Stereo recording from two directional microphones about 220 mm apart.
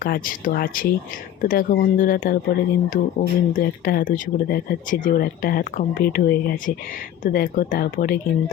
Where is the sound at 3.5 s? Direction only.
40° left (ahead or behind).